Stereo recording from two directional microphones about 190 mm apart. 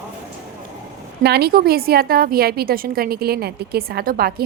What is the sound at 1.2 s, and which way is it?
A woman's voice, 55° right (ahead or behind).